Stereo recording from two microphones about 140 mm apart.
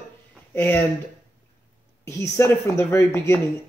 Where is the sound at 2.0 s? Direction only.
20° left (ahead or behind).